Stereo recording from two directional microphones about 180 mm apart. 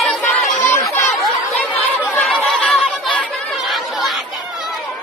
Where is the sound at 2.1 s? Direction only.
5° left (ahead or behind).